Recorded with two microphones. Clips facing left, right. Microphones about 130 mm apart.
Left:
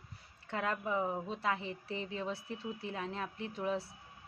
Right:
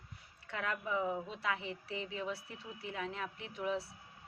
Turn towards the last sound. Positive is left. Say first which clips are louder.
# left 2 dB
turn(degrees=35)  # may be behind; listen again after turning